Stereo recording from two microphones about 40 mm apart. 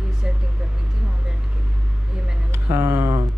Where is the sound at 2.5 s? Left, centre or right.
Right.